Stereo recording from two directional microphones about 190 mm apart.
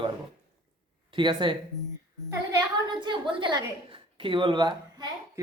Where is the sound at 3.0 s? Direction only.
25° right (ahead or behind).